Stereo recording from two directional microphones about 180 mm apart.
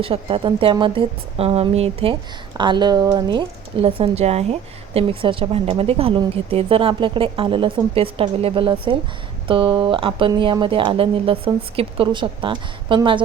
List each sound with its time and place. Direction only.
0.0 s a woman's voice: 30° right (ahead or behind)